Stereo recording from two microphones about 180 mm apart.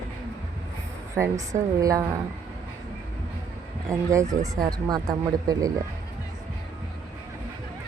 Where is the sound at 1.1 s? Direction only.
15° right (ahead or behind).